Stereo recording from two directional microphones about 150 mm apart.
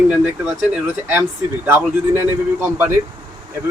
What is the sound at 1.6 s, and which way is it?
A man's voice, 15° right (ahead or behind).